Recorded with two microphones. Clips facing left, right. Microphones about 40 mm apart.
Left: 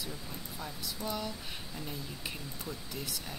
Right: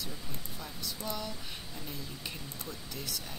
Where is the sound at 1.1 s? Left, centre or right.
Centre.